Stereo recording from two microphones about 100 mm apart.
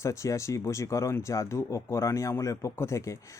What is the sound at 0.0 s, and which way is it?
Speech, 30° left (ahead or behind).